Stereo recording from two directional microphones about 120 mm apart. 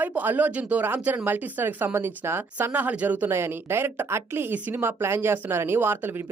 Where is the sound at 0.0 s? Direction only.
15° right (ahead or behind).